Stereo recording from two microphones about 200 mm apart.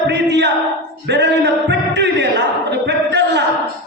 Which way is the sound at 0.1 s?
60° right (ahead or behind).